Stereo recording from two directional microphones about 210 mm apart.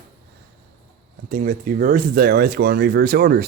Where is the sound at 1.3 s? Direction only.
40° right (ahead or behind).